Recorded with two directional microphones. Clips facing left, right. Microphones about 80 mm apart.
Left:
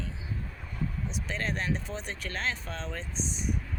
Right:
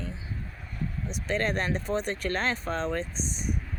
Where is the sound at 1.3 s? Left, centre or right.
Right.